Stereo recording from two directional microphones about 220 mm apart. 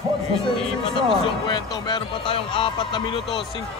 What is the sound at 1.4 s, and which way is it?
Speech, 20° left (ahead or behind).